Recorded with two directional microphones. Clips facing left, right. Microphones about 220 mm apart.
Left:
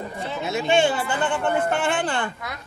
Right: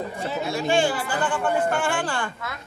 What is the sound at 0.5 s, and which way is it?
Speech, 20° left (ahead or behind).